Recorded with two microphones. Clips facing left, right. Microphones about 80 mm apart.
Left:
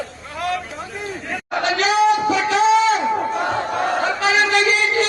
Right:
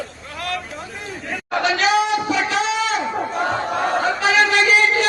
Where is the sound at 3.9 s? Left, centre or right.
Right.